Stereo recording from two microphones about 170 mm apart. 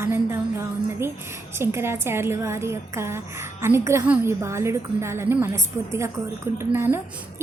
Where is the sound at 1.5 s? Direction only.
15° right (ahead or behind).